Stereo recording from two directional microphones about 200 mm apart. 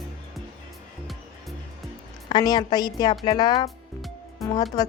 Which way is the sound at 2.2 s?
20° left (ahead or behind).